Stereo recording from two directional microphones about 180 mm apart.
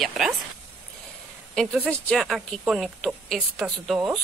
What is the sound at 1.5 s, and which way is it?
Speech, centre (ahead or behind).